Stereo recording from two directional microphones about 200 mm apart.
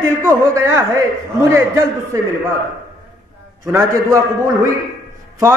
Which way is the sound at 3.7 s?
15° right (ahead or behind).